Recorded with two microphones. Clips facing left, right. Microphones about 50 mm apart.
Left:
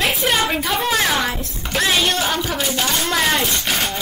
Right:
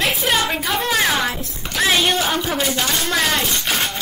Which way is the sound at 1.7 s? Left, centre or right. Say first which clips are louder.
Right 1 dB; centre.